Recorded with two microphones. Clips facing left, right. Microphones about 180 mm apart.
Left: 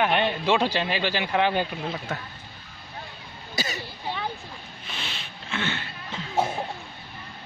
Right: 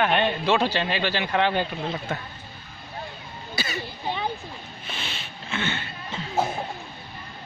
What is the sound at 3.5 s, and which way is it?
Throat clearing, 40° left (ahead or behind).